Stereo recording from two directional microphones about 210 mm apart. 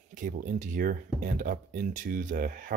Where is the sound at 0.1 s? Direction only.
40° right (ahead or behind).